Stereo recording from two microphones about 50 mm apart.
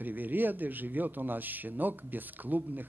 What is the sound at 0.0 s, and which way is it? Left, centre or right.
A man's voice, right.